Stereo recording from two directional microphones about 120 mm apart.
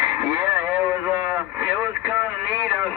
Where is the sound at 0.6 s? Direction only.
15° right (ahead or behind).